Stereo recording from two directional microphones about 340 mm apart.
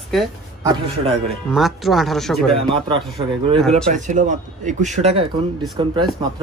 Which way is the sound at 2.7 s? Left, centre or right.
Centre.